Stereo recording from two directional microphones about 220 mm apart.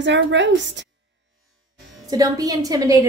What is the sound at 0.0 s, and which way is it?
Speech, 55° right (ahead or behind).